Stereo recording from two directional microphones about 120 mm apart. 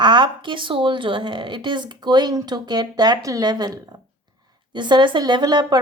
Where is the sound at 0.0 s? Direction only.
40° right (ahead or behind).